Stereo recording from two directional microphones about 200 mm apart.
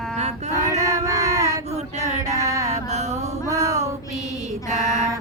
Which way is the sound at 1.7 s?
35° right (ahead or behind).